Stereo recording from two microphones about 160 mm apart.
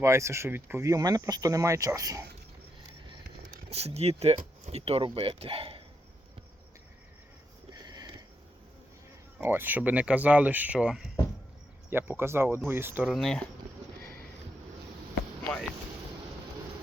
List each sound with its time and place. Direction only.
0.0 s speech: 20° right (ahead or behind)
3.7 s speech: 40° right (ahead or behind)
7.7 s a sound: 25° right (ahead or behind)
9.4 s speech: 15° right (ahead or behind)
13.1 s speech: 5° left (ahead or behind)
14.0 s sniff: 70° right (ahead or behind)